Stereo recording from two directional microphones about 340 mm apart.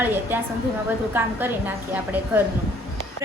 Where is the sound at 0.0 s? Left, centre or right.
Centre.